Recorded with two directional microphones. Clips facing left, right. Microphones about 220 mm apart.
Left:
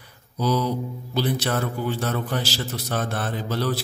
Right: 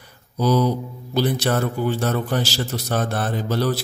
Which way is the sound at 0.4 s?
45° right (ahead or behind).